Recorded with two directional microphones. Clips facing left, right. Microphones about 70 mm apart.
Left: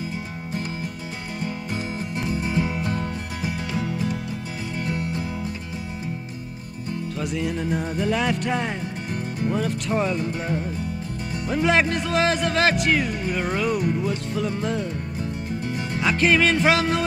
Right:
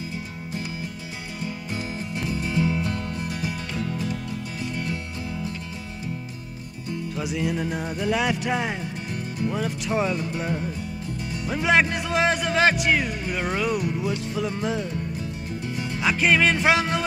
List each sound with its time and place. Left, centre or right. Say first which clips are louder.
2.1 s music: left 1 dB; left
7.2 s speech: even; centre
15.6 s music: even; left
16.0 s speech: left 1 dB; centre